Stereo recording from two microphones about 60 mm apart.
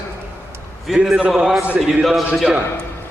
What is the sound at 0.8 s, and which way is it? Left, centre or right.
Speech, centre.